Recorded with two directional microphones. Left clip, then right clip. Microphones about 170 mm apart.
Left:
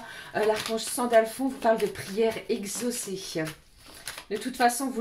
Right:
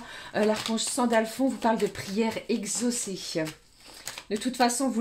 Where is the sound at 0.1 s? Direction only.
45° right (ahead or behind).